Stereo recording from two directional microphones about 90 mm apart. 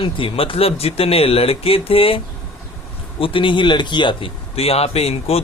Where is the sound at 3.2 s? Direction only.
70° left (ahead or behind).